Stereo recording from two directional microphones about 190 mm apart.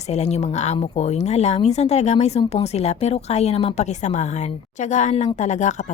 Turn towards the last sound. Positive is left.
turn(degrees=40)  # may be behind; listen again after turning